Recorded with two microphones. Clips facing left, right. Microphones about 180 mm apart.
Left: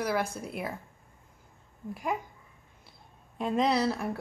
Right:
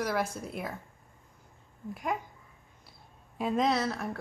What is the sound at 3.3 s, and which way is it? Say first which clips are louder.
Speech: left 1 dB; centre (ahead or behind).